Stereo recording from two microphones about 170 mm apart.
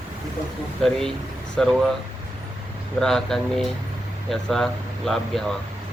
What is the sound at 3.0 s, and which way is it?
Speech, centre (ahead or behind).